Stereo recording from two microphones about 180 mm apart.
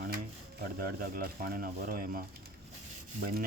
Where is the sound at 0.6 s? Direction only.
55° right (ahead or behind).